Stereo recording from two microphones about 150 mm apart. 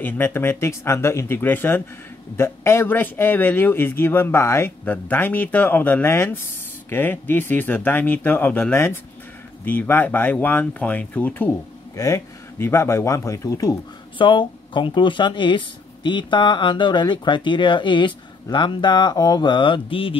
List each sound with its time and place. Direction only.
0.0 s a man's voice: 15° left (ahead or behind)
11.9 s speech: 20° left (ahead or behind); by 20.2 s 35° left (ahead or behind)